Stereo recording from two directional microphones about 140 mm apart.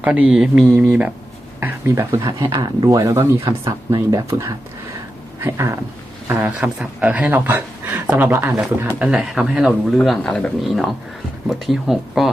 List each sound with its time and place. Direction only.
0.0 s speech: 10° right (ahead or behind)
1.6 s speech: 20° right (ahead or behind)
6.6 s speech: 5° right (ahead or behind)